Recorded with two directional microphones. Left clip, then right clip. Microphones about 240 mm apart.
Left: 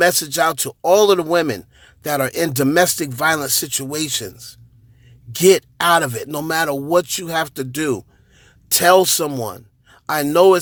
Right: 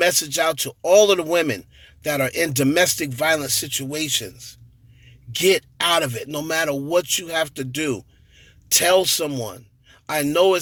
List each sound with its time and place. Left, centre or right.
0.0 s speech: centre